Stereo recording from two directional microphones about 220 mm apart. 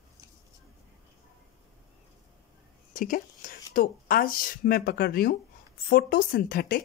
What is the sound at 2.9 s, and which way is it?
Speech, 40° left (ahead or behind).